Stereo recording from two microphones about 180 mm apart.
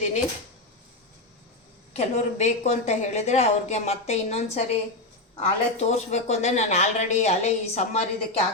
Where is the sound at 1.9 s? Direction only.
35° left (ahead or behind).